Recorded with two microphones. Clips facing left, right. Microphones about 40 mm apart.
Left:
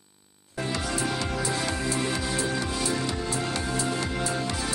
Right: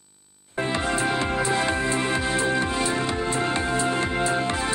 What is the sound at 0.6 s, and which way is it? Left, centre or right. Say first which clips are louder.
Music: right 5 dB; right.